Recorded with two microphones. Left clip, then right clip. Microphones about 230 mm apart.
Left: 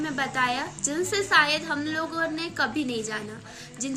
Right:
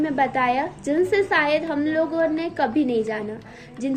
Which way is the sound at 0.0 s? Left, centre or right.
Centre.